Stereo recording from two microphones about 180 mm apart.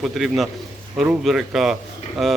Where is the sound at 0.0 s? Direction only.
Centre (ahead or behind).